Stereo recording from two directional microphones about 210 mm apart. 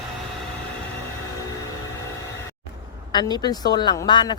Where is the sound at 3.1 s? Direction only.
20° left (ahead or behind).